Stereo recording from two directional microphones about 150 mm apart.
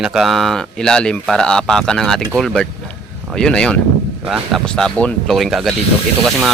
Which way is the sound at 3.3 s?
5° left (ahead or behind).